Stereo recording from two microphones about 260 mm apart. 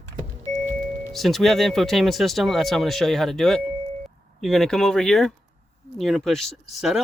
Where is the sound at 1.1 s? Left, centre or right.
Centre.